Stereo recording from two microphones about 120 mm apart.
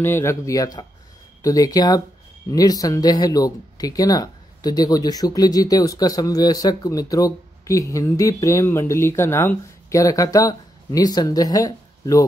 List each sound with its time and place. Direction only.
0.0 s speech: 20° left (ahead or behind)